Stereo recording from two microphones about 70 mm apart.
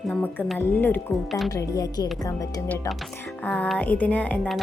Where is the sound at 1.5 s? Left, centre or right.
Left.